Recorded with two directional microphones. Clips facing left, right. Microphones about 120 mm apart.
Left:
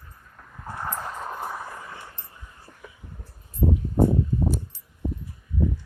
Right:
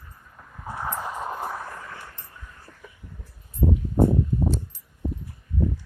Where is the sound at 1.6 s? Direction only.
15° left (ahead or behind).